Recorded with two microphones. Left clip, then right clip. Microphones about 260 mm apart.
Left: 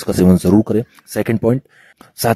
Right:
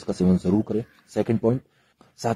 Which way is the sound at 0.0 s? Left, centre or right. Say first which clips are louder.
Left 10 dB; left.